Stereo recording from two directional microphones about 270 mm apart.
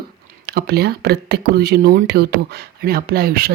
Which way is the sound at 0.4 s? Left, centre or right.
Right.